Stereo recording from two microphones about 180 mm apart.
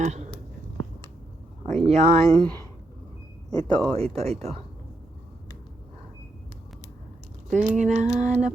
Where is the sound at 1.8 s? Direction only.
40° right (ahead or behind).